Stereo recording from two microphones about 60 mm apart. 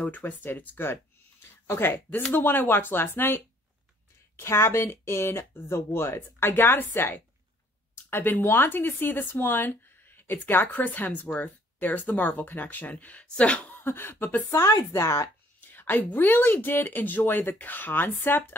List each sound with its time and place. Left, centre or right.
0.0 s speech: left
4.4 s speech: left
13.7 s speech: left
14.5 s a woman's voice: left
14.9 s speech: left
15.6 s speech: left